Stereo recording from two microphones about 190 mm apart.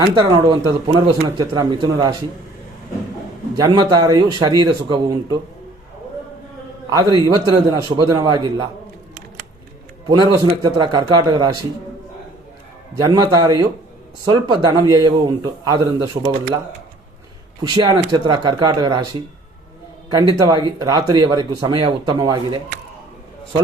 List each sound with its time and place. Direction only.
0.0 s speech: 25° right (ahead or behind)
3.6 s speech: 20° right (ahead or behind)
7.0 s speech: 25° right (ahead or behind)
10.1 s speech: 20° right (ahead or behind)
13.0 s speech: 20° right (ahead or behind)
17.6 s speech: 25° right (ahead or behind)